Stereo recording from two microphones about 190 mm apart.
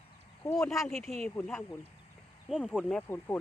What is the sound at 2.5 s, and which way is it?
Speech, 5° right (ahead or behind).